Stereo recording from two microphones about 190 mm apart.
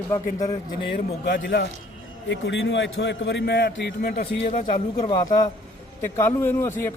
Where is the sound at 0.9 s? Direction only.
65° left (ahead or behind).